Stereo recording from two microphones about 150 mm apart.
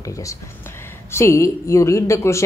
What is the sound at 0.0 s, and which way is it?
A man's voice, 20° left (ahead or behind).